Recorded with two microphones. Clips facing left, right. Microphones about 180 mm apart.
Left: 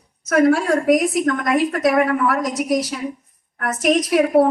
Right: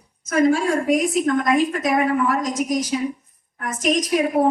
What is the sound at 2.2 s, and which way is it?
A woman's voice, 65° left (ahead or behind).